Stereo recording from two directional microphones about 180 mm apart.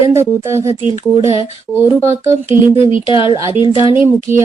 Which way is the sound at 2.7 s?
30° left (ahead or behind).